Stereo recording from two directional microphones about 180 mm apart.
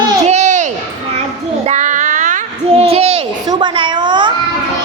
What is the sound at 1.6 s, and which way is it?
Child singing, 40° right (ahead or behind).